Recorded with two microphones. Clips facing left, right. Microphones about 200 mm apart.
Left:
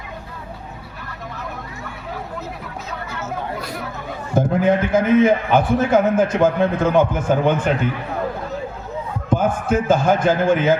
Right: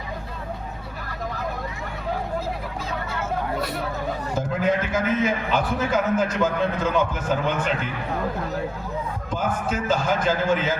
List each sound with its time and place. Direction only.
4.4 s a man's voice: 55° left (ahead or behind)
9.3 s a man's voice: 50° left (ahead or behind)